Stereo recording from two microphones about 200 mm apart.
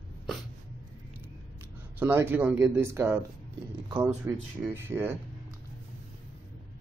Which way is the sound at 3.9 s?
20° right (ahead or behind).